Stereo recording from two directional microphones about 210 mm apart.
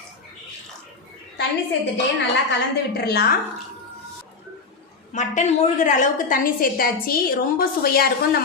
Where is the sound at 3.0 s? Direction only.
50° left (ahead or behind).